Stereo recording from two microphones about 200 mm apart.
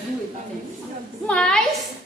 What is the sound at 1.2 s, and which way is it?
Speech, 5° left (ahead or behind).